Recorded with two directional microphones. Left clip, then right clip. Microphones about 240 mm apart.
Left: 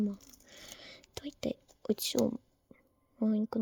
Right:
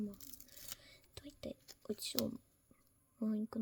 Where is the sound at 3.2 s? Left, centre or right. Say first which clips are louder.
Left 9 dB; left.